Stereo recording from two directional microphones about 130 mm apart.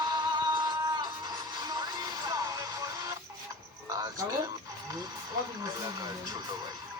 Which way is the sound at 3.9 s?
25° right (ahead or behind).